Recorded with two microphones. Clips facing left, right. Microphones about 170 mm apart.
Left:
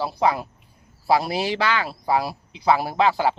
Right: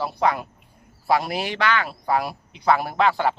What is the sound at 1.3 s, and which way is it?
Speech, 30° left (ahead or behind).